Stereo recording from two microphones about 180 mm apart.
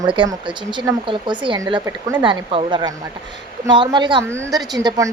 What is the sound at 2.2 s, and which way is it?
A woman's voice, 30° right (ahead or behind).